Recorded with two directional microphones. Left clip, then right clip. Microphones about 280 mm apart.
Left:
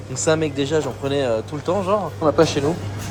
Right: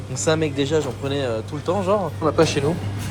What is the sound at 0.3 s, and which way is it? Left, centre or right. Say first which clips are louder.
Speech: left 1 dB; centre.